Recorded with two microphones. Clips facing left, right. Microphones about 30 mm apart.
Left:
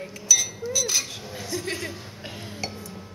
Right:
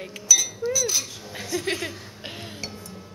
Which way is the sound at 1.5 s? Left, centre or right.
Right.